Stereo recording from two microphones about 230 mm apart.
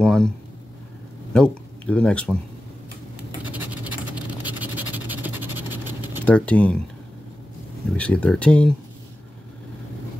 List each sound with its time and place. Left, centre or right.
0.0 s speech: centre
1.3 s speech: centre
3.5 s vehicle: centre
6.2 s speech: centre
8.0 s speech: centre